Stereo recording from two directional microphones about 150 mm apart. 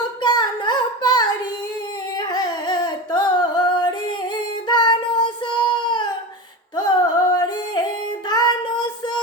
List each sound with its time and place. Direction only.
0.2 s a sound: 30° left (ahead or behind)
2.1 s singing: 25° left (ahead or behind)
4.7 s child singing: 30° left (ahead or behind)
6.7 s music: 25° left (ahead or behind)